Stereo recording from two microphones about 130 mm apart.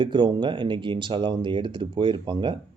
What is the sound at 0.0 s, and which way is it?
Speech, 35° right (ahead or behind).